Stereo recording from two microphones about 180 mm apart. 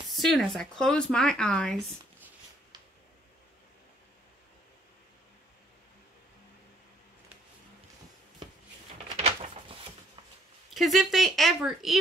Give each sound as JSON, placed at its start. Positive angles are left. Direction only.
{"t": 0.1, "sound": "speech", "side_deg": 0}
{"t": 9.1, "sound": "a sound", "side_deg": -35}
{"t": 10.7, "sound": "speech", "side_deg": 0}